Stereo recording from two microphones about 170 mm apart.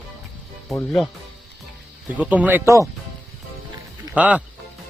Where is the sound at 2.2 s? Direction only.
10° right (ahead or behind).